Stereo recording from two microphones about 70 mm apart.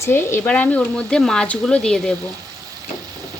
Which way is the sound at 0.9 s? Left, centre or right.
Centre.